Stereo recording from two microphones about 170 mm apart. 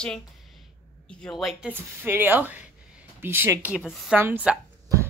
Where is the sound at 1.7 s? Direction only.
10° right (ahead or behind).